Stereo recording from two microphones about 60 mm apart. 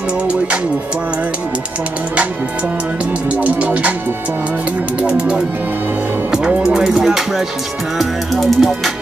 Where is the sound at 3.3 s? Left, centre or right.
Right.